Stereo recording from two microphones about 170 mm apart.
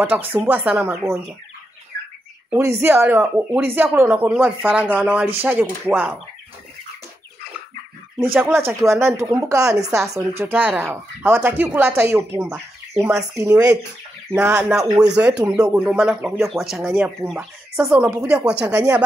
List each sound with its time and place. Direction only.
0.3 s speech: 10° right (ahead or behind)
2.5 s speech: 15° right (ahead or behind)
8.2 s speech: 10° right (ahead or behind)
15.4 s speech: 20° right (ahead or behind)
15.7 s speech: 5° right (ahead or behind)